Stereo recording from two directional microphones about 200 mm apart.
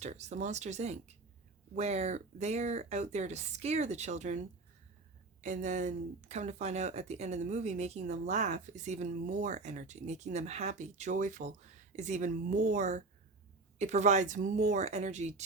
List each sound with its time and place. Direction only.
0.0 s speech: 35° right (ahead or behind)